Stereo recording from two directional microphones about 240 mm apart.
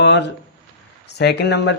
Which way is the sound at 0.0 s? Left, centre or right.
Left.